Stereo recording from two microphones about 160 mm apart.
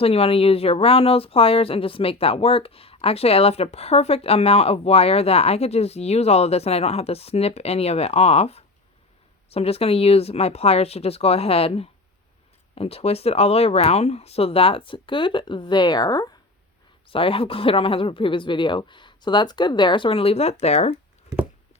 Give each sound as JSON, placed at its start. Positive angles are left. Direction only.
{"t": 0.0, "sound": "speech", "side_deg": 35}